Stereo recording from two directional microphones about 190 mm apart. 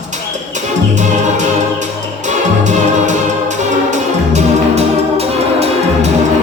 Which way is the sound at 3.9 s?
35° right (ahead or behind).